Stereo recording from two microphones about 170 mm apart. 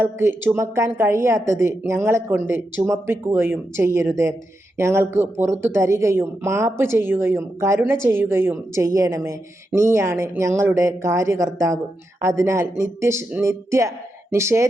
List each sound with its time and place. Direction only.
0.0 s speech: 15° right (ahead or behind)